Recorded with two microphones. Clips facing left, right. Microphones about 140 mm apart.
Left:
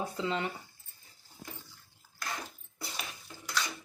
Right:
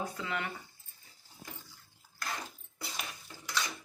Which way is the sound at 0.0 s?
25° left (ahead or behind).